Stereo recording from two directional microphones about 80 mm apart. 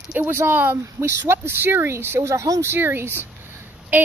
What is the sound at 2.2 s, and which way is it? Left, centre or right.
Speech, right.